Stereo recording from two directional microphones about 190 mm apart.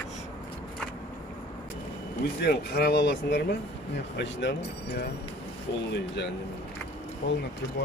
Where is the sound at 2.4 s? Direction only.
55° left (ahead or behind).